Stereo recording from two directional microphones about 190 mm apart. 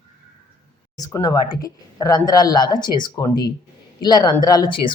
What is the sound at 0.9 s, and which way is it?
Speech, 20° left (ahead or behind).